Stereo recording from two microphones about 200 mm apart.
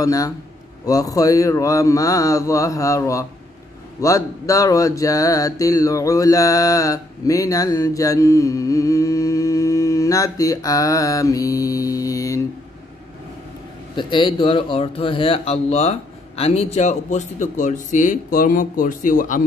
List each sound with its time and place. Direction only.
0.0 s mantra: 15° left (ahead or behind)
13.9 s speech: 25° left (ahead or behind); by 19.4 s 40° left (ahead or behind)